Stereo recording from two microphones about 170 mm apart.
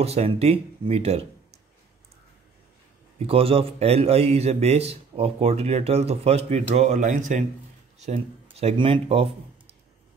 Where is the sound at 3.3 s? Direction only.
35° right (ahead or behind).